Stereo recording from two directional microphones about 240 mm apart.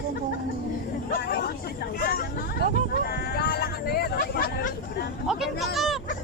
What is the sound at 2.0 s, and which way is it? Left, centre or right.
Vehicle, left.